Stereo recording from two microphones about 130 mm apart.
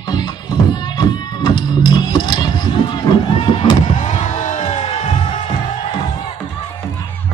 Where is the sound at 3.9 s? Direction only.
65° left (ahead or behind).